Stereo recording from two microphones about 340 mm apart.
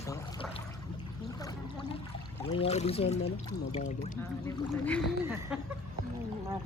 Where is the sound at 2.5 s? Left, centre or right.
Centre.